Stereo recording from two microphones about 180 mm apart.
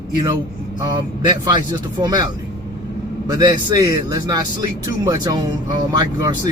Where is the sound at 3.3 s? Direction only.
20° right (ahead or behind).